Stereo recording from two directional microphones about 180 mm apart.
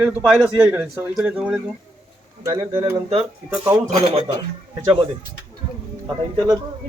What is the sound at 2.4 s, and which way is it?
Speech, 20° right (ahead or behind).